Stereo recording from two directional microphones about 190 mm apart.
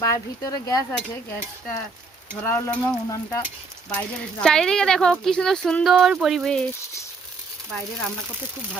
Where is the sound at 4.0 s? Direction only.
5° left (ahead or behind).